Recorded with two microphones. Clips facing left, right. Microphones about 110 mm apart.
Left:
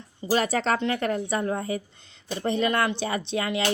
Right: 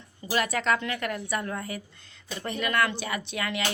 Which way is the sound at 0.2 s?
30° left (ahead or behind).